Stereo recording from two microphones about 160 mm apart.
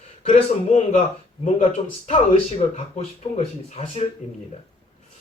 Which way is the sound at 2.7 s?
40° left (ahead or behind).